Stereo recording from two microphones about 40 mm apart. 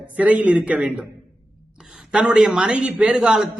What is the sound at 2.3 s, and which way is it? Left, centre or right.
A man's voice, centre.